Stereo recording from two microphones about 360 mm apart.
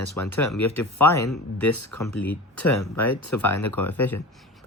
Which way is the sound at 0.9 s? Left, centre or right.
Centre.